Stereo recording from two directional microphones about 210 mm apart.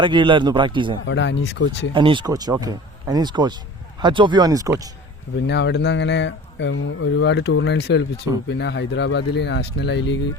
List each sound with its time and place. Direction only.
0.0 s speech: 25° right (ahead or behind)
1.0 s speech: 60° left (ahead or behind)
1.9 s speech: 25° right (ahead or behind)
5.5 s speech: 55° left (ahead or behind)